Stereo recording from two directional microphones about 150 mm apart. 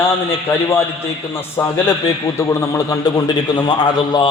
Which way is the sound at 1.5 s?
20° left (ahead or behind).